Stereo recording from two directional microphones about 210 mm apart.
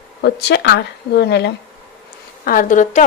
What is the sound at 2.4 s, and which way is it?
Speech, 40° left (ahead or behind).